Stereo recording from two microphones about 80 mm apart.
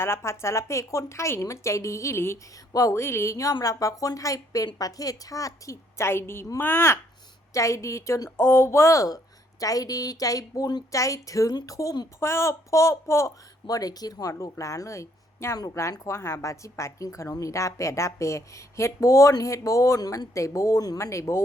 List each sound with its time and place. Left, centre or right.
0.0 s a woman's voice: left
10.9 s speech: left
12.2 s a woman's voice: left